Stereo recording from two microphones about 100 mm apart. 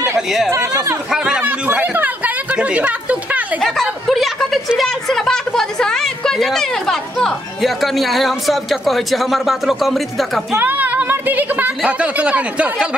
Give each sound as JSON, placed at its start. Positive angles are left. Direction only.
{"t": 0.5, "sound": "speech", "side_deg": -30}
{"t": 1.1, "sound": "speech", "side_deg": -10}
{"t": 3.6, "sound": "a woman's voice", "side_deg": 0}
{"t": 10.5, "sound": "a woman's voice", "side_deg": -20}